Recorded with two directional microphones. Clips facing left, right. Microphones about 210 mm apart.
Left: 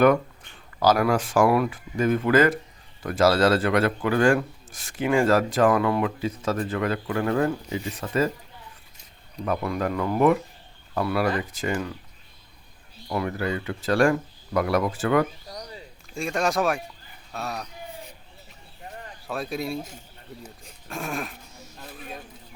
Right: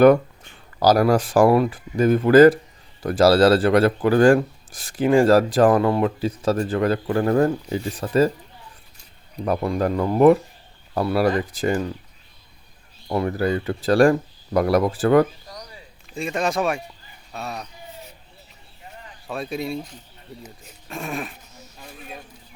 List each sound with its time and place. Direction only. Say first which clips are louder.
0.8 s speech: right 4 dB; 35° right (ahead or behind)
9.4 s speech: right 4 dB; 35° right (ahead or behind)
13.1 s speech: right 5 dB; 35° right (ahead or behind)
16.1 s speech: right 1 dB; centre (ahead or behind)
19.3 s speech: right 2 dB; centre (ahead or behind)
20.9 s speech: right 2 dB; centre (ahead or behind)